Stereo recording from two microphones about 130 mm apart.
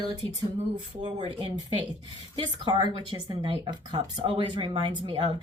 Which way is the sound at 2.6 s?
35° right (ahead or behind).